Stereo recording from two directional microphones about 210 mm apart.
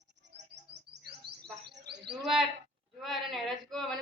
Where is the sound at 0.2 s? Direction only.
55° right (ahead or behind).